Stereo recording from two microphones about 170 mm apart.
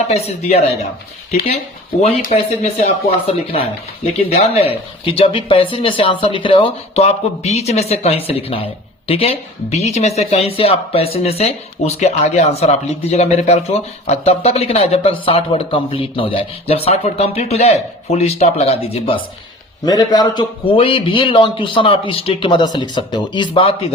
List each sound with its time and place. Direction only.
0.1 s speech: 40° left (ahead or behind)
2.0 s speech: 40° left (ahead or behind)
19.8 s a man's voice: 25° left (ahead or behind)